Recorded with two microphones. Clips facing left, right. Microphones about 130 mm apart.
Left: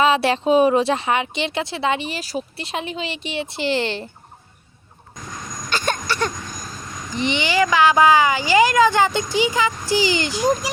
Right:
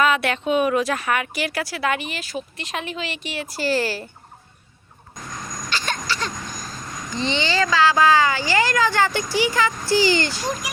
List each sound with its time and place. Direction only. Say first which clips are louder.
0.0 s speech: left 3 dB; 30° left (ahead or behind)
5.7 s a sound: left 4 dB; 50° left (ahead or behind)
7.1 s speech: left 2 dB; 15° left (ahead or behind)